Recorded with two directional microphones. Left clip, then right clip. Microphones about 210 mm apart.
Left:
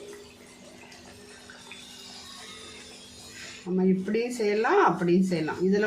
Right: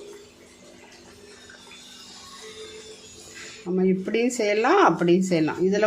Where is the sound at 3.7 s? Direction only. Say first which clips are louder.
Right 3 dB; 45° right (ahead or behind).